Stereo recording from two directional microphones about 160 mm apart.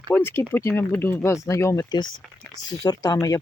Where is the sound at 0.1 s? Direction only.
15° left (ahead or behind).